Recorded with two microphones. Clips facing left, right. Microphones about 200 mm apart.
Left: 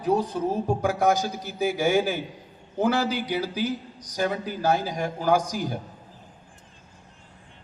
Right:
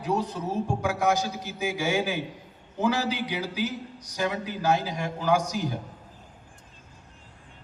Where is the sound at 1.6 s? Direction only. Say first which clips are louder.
Left 5 dB; 35° left (ahead or behind).